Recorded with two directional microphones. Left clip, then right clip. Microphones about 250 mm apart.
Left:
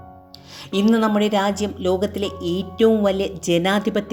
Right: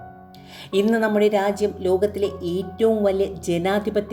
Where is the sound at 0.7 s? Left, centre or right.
Left.